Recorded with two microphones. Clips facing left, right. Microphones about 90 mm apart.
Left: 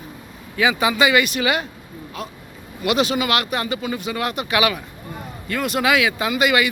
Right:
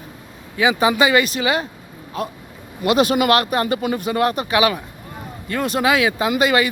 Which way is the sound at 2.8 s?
45° right (ahead or behind).